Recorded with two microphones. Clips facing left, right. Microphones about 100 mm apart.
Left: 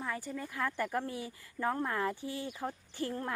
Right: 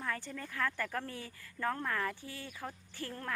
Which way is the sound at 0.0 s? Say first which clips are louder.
Left 2 dB; 10° left (ahead or behind).